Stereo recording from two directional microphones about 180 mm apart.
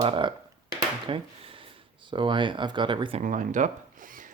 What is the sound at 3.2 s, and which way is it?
Zipper, 45° right (ahead or behind).